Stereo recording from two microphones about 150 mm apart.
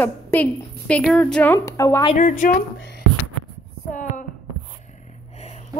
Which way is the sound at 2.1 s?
60° left (ahead or behind).